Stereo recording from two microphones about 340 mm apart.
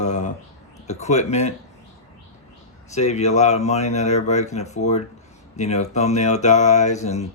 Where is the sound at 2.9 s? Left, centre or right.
Centre.